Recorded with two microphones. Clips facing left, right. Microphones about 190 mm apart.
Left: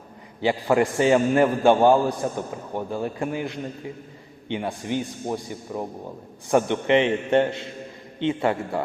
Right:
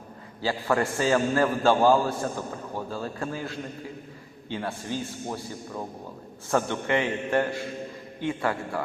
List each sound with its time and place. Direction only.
0.4 s a man's voice: 20° left (ahead or behind)